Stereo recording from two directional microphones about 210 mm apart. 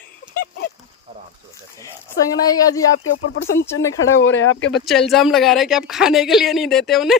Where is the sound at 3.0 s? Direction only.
80° left.